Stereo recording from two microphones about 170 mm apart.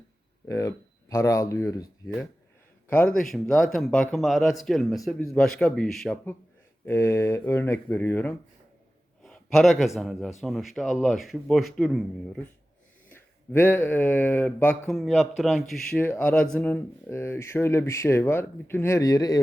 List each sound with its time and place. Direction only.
0.4 s speech: 20° left (ahead or behind)
2.9 s speech: 5° left (ahead or behind)
9.2 s a man's voice: centre (ahead or behind); by 19.4 s 20° left (ahead or behind)